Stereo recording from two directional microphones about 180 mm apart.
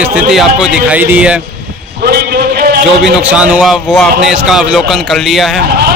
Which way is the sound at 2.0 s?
60° right (ahead or behind).